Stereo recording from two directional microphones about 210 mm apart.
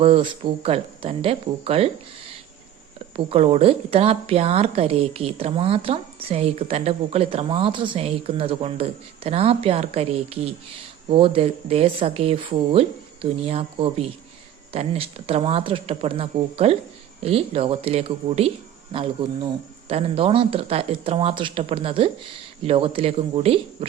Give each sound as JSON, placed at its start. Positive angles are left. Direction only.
{"t": 0.0, "sound": "a woman's voice", "side_deg": -25}
{"t": 3.2, "sound": "a woman's voice", "side_deg": -25}